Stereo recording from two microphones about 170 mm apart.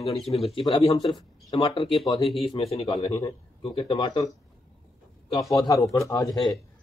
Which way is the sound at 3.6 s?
30° left (ahead or behind).